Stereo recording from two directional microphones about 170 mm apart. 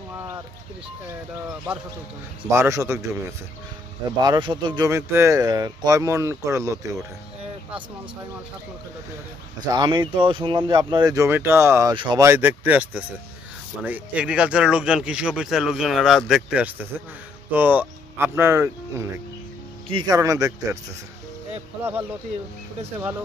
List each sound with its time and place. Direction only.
2.5 s a man's voice: 15° right (ahead or behind)
9.7 s speech: 25° right (ahead or behind)
11.9 s speech: 25° right (ahead or behind)
12.3 s a man's voice: 10° right (ahead or behind)
19.9 s speech: 25° right (ahead or behind)